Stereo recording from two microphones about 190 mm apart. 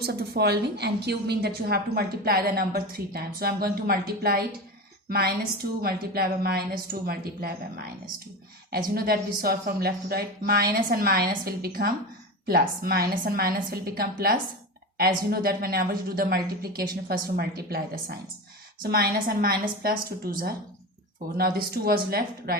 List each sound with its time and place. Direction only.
0.0 s a woman's voice: 55° right (ahead or behind)